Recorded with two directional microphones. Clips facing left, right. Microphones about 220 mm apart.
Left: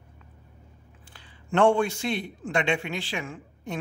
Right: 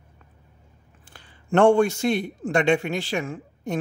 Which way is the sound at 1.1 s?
45° right (ahead or behind).